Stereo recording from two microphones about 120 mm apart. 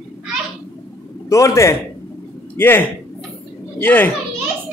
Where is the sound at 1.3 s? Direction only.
25° left (ahead or behind).